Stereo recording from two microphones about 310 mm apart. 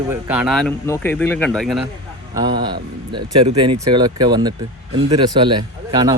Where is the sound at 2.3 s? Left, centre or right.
Centre.